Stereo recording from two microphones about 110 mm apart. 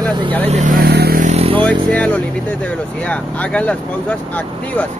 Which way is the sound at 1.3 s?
60° right (ahead or behind).